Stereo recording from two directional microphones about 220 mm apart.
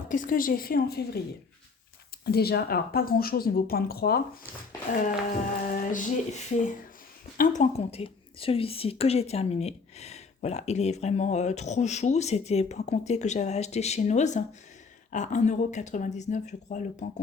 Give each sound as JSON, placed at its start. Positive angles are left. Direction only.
{"t": 0.1, "sound": "a woman's voice", "side_deg": 40}
{"t": 2.2, "sound": "speech", "side_deg": 45}
{"t": 5.6, "sound": "a woman's voice", "side_deg": 40}